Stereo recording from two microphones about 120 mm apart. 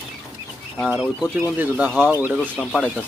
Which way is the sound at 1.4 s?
15° right (ahead or behind).